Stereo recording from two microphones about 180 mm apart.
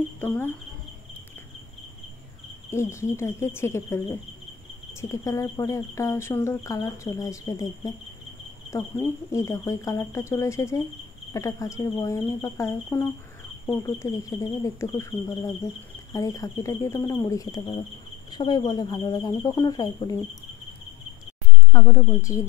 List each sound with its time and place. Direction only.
0.2 s cricket: 10° left (ahead or behind)
2.7 s speech: 15° left (ahead or behind)
21.7 s speech: 15° left (ahead or behind)